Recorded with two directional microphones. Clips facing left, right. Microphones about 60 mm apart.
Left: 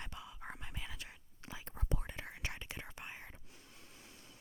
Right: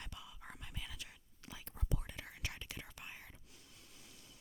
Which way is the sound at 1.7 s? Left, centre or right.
Left.